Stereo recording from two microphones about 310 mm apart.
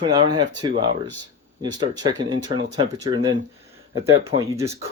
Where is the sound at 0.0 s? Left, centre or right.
Centre.